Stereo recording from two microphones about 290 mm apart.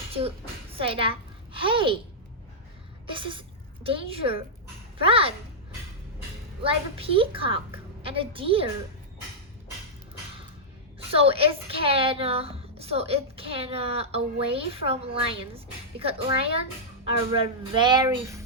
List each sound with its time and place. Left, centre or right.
0.1 s a woman's voice: centre
3.1 s a woman's voice: centre
6.6 s a woman's voice: centre
11.1 s a woman's voice: centre